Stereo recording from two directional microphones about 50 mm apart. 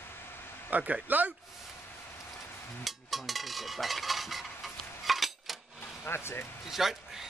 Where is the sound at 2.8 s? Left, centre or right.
Centre.